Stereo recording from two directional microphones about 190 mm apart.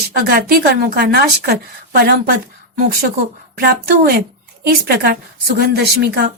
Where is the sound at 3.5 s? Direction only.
55° right (ahead or behind).